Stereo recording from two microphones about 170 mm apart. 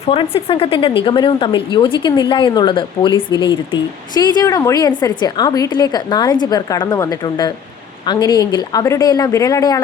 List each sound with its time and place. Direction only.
0.1 s speech: 35° left (ahead or behind)